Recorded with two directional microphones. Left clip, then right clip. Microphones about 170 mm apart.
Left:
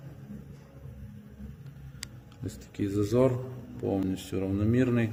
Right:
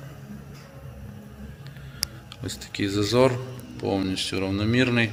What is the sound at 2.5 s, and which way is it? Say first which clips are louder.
Speech: right 6 dB; 10° left (ahead or behind).